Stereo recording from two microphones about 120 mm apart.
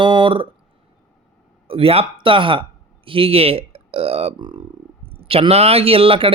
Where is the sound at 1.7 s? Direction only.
50° right (ahead or behind).